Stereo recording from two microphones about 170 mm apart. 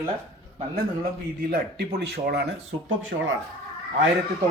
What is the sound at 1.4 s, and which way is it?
Speech, 65° right (ahead or behind).